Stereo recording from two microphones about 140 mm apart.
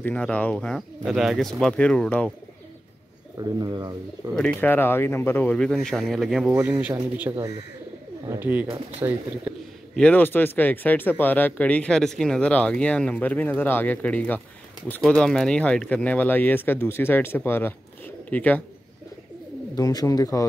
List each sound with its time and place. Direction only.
0.0 s speech: 10° left (ahead or behind)
3.3 s speech: 25° right (ahead or behind)
4.3 s speech: 5° left (ahead or behind)
7.2 s speech: 15° right (ahead or behind)
9.0 s speech: 25° right (ahead or behind)
9.5 s a sound: 10° right (ahead or behind)
9.9 s speech: 10° left (ahead or behind)
19.7 s speech: 25° left (ahead or behind)